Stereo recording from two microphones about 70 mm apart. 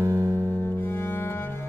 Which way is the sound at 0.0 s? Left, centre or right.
Right.